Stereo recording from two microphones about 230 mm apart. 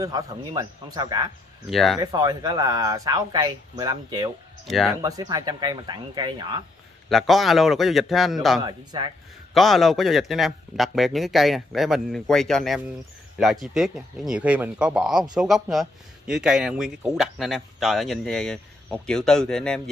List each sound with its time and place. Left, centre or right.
0.0 s speech: centre
1.7 s speech: centre
2.0 s speech: centre
4.6 s speech: centre
5.0 s speech: centre
7.1 s speech: centre
8.6 s a man's voice: centre
9.5 s speech: centre